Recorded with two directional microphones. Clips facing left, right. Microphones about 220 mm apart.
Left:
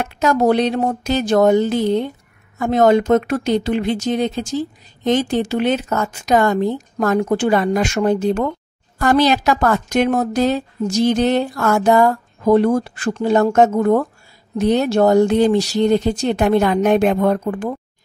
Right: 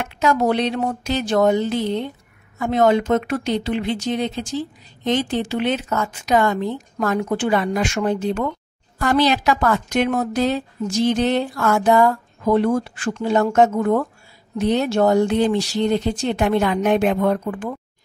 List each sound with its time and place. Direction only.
0.0 s a woman's voice: 40° left (ahead or behind)